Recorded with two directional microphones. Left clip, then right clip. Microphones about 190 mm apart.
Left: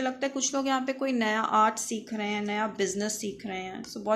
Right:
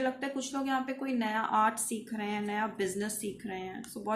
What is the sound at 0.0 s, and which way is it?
A woman's voice, 40° left (ahead or behind).